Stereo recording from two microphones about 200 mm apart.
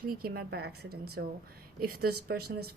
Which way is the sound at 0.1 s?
50° right (ahead or behind).